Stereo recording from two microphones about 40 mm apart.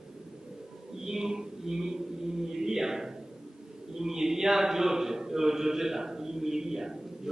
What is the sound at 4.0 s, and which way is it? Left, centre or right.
A man's voice, centre.